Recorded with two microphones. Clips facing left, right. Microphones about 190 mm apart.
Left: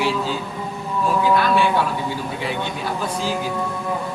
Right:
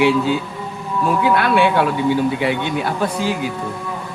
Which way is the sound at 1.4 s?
65° right (ahead or behind).